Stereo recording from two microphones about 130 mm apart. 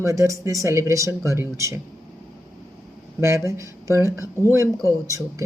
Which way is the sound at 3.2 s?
20° right (ahead or behind).